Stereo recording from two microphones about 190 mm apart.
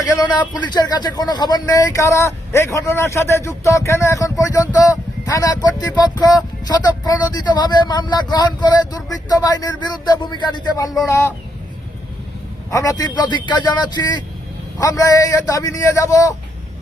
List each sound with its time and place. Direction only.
0.0 s speech: 20° left (ahead or behind)
12.7 s speech: 15° left (ahead or behind)